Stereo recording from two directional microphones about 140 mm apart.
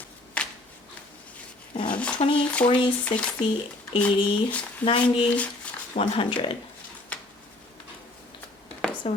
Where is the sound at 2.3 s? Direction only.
10° left (ahead or behind).